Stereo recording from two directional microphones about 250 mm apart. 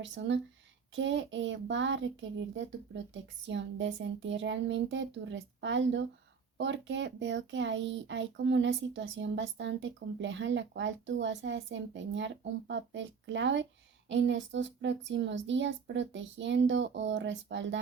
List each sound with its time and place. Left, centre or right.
0.0 s a child's voice: right